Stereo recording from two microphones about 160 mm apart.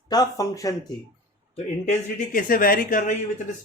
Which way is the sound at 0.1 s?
20° left (ahead or behind).